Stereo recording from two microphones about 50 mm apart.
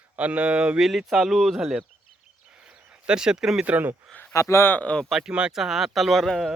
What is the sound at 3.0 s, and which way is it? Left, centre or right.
Speech, centre.